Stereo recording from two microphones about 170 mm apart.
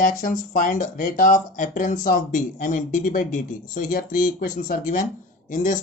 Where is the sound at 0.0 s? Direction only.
50° left (ahead or behind).